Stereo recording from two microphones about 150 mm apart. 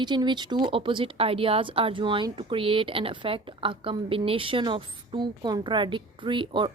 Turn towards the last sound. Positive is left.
turn(degrees=-30)  # may be behind; listen again after turning